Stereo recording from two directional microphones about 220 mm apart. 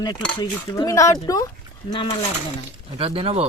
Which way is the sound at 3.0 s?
25° right (ahead or behind).